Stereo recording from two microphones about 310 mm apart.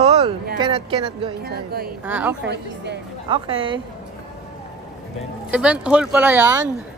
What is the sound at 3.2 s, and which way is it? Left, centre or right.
Speech, centre.